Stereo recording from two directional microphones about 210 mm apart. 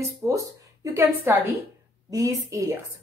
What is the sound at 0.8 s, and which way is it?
A woman's voice, 15° right (ahead or behind).